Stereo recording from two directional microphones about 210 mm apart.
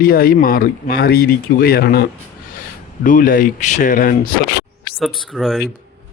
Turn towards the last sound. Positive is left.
turn(degrees=0)  # may be behind; listen again after turning